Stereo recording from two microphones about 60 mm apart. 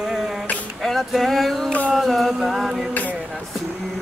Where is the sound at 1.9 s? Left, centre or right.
Centre.